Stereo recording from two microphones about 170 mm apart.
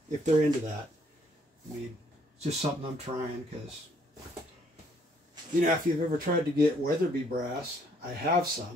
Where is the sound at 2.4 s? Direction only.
40° right (ahead or behind).